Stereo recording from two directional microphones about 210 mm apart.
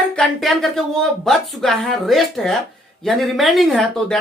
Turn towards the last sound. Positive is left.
turn(degrees=0)  # may be behind; listen again after turning